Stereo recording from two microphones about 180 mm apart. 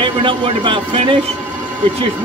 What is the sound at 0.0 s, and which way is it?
A man's voice, 30° right (ahead or behind).